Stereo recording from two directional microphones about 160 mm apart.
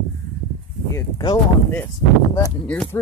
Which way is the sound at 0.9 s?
20° left (ahead or behind).